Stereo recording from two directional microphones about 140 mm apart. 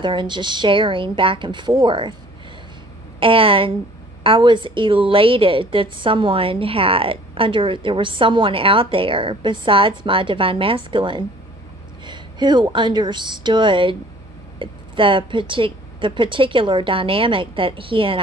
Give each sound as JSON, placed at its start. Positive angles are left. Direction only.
{"t": 0.0, "sound": "a woman's voice", "side_deg": -35}
{"t": 3.2, "sound": "a woman's voice", "side_deg": -40}